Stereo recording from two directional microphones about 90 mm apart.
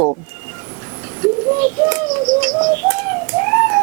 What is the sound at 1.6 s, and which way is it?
Bird, 20° right (ahead or behind).